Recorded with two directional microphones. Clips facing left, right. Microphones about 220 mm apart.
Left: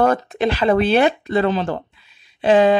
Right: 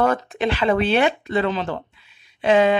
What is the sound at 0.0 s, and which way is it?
Speech, 35° left (ahead or behind).